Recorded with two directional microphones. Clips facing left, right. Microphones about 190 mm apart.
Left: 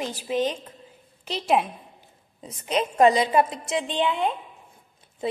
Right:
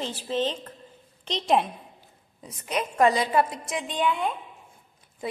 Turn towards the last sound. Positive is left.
turn(degrees=25)  # may be behind; listen again after turning